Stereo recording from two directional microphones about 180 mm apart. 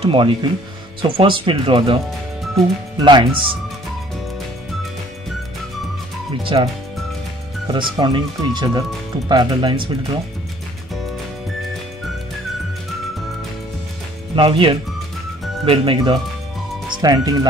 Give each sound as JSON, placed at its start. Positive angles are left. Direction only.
{"t": 0.0, "sound": "speech", "side_deg": -25}
{"t": 3.0, "sound": "speech", "side_deg": -25}
{"t": 6.4, "sound": "speech", "side_deg": -30}
{"t": 14.3, "sound": "speech", "side_deg": -30}